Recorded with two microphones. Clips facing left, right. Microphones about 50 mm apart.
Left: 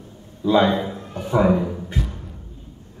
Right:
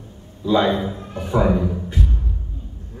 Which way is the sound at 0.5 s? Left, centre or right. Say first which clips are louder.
Left 1 dB; centre.